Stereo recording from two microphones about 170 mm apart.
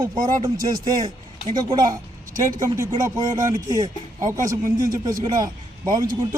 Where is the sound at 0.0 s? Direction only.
25° right (ahead or behind).